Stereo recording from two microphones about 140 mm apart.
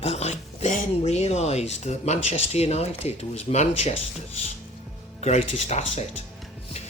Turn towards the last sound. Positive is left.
turn(degrees=50)  # may be behind; listen again after turning